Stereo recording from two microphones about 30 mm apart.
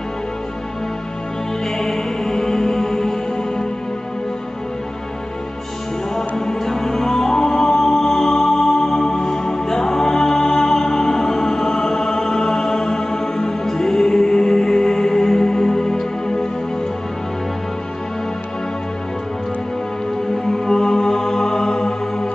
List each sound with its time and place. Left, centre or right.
1.8 s music: centre
6.1 s music: centre
20.4 s music: centre